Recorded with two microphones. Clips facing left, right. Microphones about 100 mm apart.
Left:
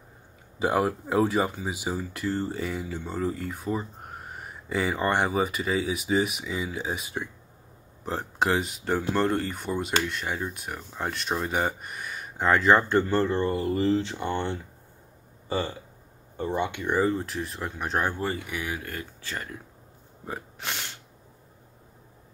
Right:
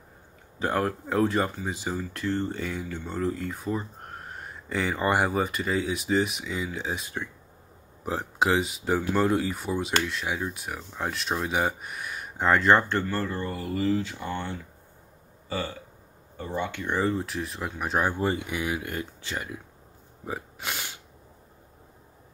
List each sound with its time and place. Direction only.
0.6 s speech: 10° left (ahead or behind)
13.1 s speech: 25° left (ahead or behind)
15.4 s burping: 20° left (ahead or behind)
16.3 s speech: 20° left (ahead or behind); by 19.6 s 10° right (ahead or behind)
20.2 s a sound: 5° right (ahead or behind)